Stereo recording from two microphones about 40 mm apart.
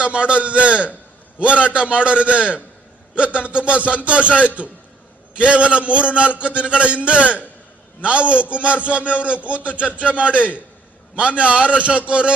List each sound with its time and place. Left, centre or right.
0.0 s music: right
4.3 s a man's voice: left
5.4 s music: right
9.8 s speech: left
10.1 s music: right
10.3 s a man's voice: left
11.1 s a man's voice: right